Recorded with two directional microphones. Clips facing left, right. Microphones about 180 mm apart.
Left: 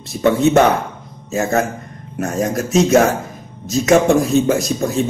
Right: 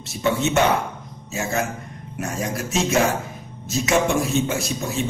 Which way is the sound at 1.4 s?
55° left (ahead or behind).